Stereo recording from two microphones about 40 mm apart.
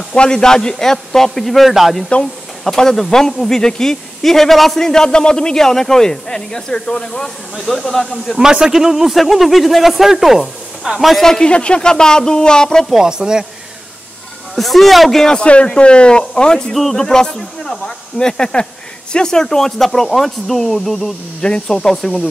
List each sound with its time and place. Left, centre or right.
0.1 s speech: centre
2.6 s speech: centre
7.5 s speech: centre
8.4 s a man's voice: centre
11.2 s speech: centre
11.5 s speech: left
12.9 s a man's voice: centre
14.5 s speech: centre
15.3 s speech: left
16.7 s speech: centre
21.4 s speech: centre